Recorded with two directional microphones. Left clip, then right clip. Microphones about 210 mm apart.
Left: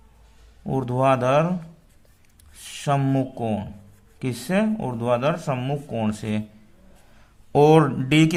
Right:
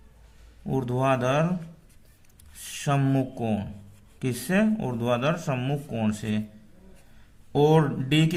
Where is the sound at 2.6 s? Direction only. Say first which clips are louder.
Left 4 dB; 10° left (ahead or behind).